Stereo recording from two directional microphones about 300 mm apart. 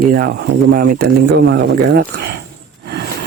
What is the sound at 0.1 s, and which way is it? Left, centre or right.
Speech, right.